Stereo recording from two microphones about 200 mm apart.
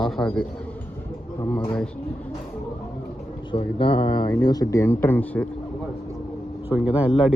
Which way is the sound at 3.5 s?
25° left (ahead or behind).